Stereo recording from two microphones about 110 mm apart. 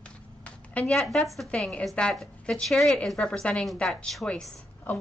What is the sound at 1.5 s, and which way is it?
A woman's voice, 10° left (ahead or behind).